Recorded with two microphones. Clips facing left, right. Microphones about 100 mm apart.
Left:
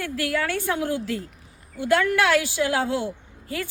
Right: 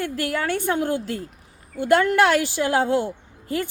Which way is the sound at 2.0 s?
35° right (ahead or behind).